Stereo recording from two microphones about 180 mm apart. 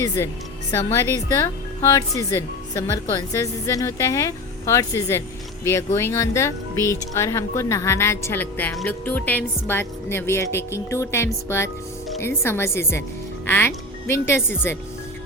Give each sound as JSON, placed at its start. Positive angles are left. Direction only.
{"t": 0.9, "sound": "a woman's voice", "side_deg": 15}